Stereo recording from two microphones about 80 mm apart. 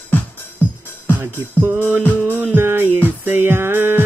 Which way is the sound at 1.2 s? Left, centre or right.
Right.